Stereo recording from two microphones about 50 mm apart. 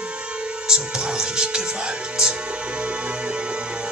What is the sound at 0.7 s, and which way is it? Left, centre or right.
Music, centre.